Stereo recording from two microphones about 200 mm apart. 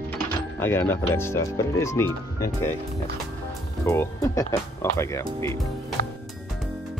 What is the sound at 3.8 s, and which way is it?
Speech, 15° left (ahead or behind).